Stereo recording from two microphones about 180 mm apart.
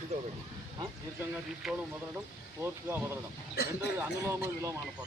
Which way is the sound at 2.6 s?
10° right (ahead or behind).